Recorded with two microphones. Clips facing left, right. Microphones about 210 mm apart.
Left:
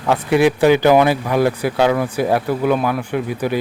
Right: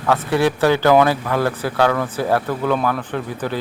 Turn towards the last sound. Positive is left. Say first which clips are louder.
# left 4 dB
turn(degrees=10)  # may be behind; listen again after turning